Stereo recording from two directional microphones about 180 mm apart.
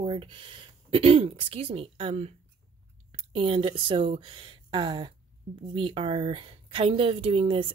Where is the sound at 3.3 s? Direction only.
30° right (ahead or behind).